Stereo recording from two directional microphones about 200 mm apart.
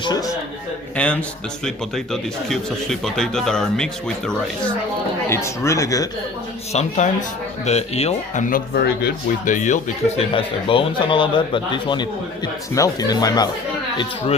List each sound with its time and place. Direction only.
0.0 s speech: 20° left (ahead or behind)
0.9 s speech: 5° left (ahead or behind)
5.3 s speech: 15° left (ahead or behind)
6.7 s speech: 35° left (ahead or behind)
10.2 s speech: 25° left (ahead or behind)